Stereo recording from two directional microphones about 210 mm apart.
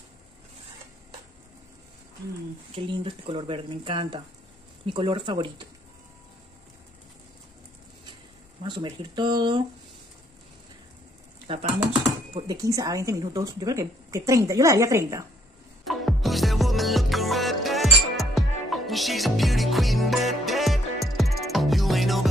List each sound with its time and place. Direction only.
2.7 s speech: 25° right (ahead or behind)
8.6 s speech: 20° right (ahead or behind)
11.5 s a woman's voice: 25° right (ahead or behind)
15.8 s music: centre (ahead or behind)